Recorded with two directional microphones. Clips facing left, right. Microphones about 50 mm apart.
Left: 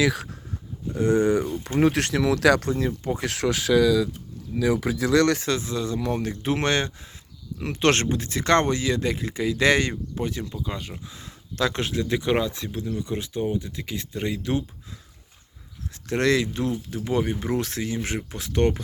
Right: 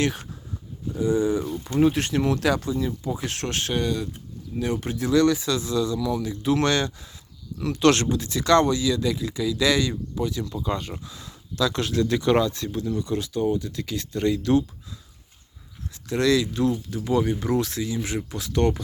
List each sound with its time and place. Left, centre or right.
0.9 s speech: left
1.8 s speech: left
3.4 s speech: left
4.5 s speech: left
5.4 s speech: left
10.6 s speech: centre
11.0 s speech: left
11.5 s speech: left
11.8 s speech: left
16.0 s speech: left
18.2 s speech: left